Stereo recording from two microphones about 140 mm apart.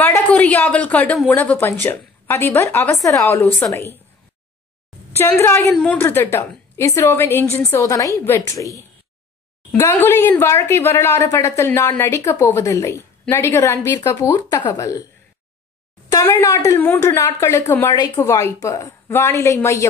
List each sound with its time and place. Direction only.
0.0 s a woman's voice: 10° left (ahead or behind)
5.1 s a woman's voice: 15° left (ahead or behind)
16.1 s a woman's voice: 20° left (ahead or behind)